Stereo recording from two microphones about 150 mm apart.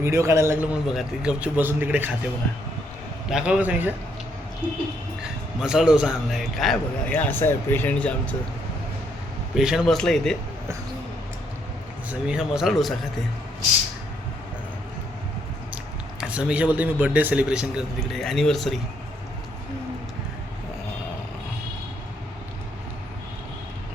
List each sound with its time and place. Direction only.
0.0 s speech: 20° right (ahead or behind)
3.2 s a man's voice: 5° right (ahead or behind)
9.6 s speech: 5° right (ahead or behind)
12.3 s speech: 5° right (ahead or behind)
16.2 s speech: 5° right (ahead or behind)